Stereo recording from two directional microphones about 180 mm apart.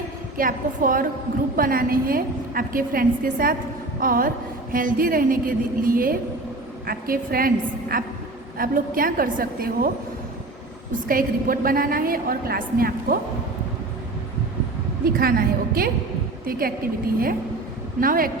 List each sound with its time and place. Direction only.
0.3 s a woman's voice: 50° right (ahead or behind)
11.1 s a woman's voice: 50° right (ahead or behind)
15.0 s a woman's voice: 55° right (ahead or behind)
18.0 s a woman's voice: 50° right (ahead or behind)